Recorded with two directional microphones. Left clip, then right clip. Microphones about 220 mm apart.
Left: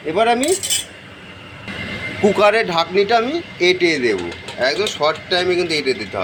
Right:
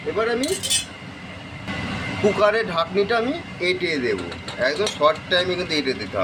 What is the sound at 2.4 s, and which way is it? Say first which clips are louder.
Speech: left 6 dB; 15° left (ahead or behind).